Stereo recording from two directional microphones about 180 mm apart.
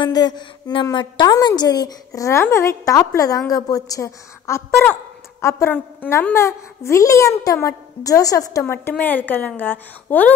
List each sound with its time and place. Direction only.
0.0 s a woman's voice: 25° left (ahead or behind)